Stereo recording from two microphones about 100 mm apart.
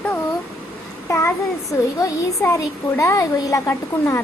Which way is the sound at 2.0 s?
35° left (ahead or behind).